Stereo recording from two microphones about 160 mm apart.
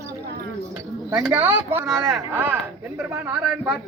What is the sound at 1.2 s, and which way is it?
Speech, 10° right (ahead or behind).